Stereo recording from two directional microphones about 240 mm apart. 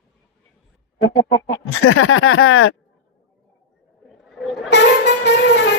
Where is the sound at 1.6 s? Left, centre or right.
Left.